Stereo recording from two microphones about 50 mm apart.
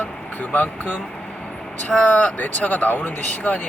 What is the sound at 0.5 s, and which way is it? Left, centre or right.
Speech, left.